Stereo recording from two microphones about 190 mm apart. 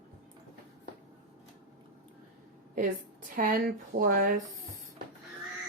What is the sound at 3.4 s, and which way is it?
A woman's voice, 45° right (ahead or behind).